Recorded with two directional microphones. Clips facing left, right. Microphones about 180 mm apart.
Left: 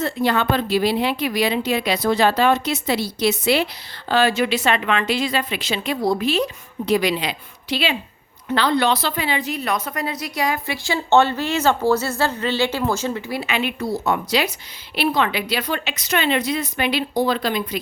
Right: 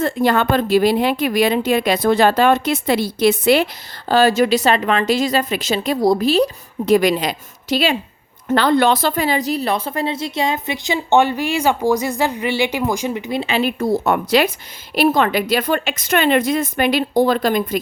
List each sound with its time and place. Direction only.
0.0 s a woman's voice: 50° right (ahead or behind)
4.1 s a woman's voice: 40° right (ahead or behind)